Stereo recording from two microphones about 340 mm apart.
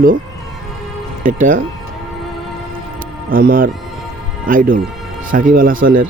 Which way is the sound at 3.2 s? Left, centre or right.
Right.